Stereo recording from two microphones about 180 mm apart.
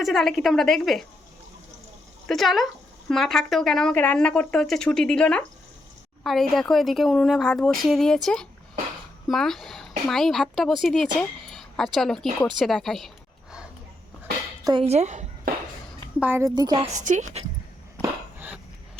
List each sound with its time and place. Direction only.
0.0 s speech: centre (ahead or behind)
2.2 s speech: centre (ahead or behind)
14.6 s speech: 25° right (ahead or behind)
14.8 s speech: 40° right (ahead or behind)
16.2 s a woman's voice: 15° right (ahead or behind)
16.9 s a woman's voice: 40° right (ahead or behind)
18.3 s a sound: 10° right (ahead or behind)